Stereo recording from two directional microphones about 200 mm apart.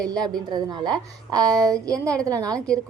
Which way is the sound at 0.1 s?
20° right (ahead or behind).